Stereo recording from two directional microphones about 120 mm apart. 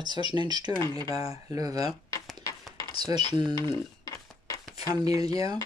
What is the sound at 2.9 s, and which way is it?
Dishes, 35° right (ahead or behind).